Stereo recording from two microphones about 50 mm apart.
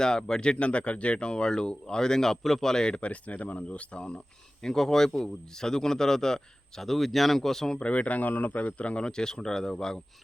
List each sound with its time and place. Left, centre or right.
0.0 s a man's voice: centre
4.6 s a man's voice: centre
7.8 s speech: left